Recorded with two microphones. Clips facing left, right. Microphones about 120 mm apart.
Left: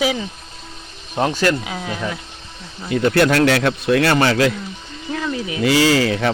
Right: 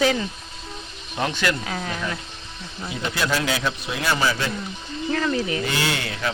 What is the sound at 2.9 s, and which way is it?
Speech, 60° left (ahead or behind).